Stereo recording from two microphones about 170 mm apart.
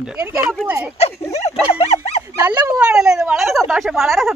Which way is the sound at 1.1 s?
15° left (ahead or behind).